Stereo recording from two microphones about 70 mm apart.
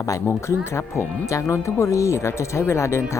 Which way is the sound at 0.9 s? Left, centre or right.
Left.